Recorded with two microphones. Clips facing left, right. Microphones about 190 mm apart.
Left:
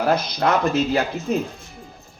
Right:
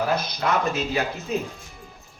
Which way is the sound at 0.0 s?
60° left (ahead or behind).